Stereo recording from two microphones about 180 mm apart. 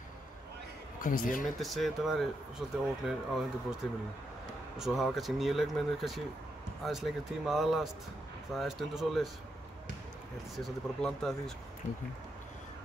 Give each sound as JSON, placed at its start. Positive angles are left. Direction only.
{"t": 1.0, "sound": "speech", "side_deg": 50}
{"t": 1.6, "sound": "speech", "side_deg": 0}
{"t": 4.7, "sound": "speech", "side_deg": 0}
{"t": 10.5, "sound": "speech", "side_deg": 0}